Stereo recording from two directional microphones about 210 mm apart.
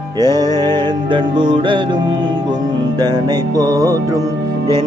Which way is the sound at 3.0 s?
20° right (ahead or behind).